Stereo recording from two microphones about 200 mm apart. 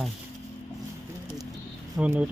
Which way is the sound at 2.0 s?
5° right (ahead or behind).